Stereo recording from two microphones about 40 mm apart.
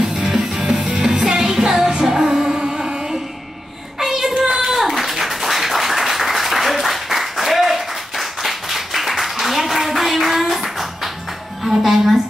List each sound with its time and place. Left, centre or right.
0.1 s music: centre
4.0 s child singing: centre
4.4 s hands: centre
4.7 s clapping: centre
11.6 s music: centre